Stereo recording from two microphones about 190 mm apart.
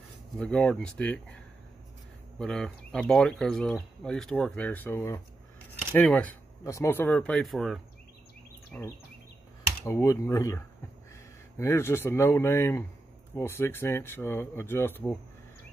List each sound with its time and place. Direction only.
0.4 s speech: 5° left (ahead or behind)
2.3 s speech: 5° left (ahead or behind)